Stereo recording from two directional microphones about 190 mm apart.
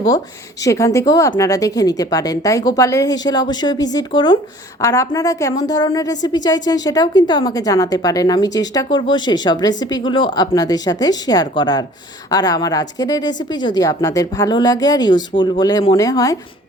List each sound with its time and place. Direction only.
0.6 s a woman's voice: 15° left (ahead or behind)